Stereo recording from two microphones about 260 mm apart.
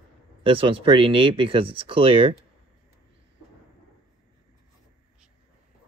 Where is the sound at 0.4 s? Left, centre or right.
Right.